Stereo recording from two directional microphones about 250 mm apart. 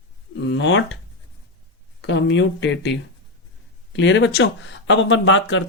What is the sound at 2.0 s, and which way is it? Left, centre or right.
Speech, left.